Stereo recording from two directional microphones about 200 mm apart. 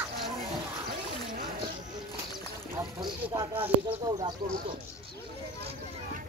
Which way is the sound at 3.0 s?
20° right (ahead or behind).